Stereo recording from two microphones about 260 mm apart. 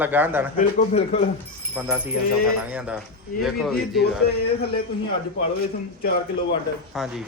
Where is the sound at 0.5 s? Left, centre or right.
Left.